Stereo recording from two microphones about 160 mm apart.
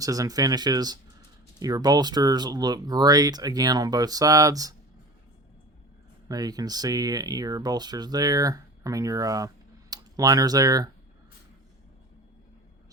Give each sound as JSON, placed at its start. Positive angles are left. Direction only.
{"t": 0.0, "sound": "speech", "side_deg": -20}
{"t": 6.2, "sound": "speech", "side_deg": -25}